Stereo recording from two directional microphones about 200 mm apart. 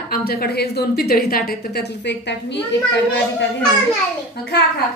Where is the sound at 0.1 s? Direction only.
50° left (ahead or behind).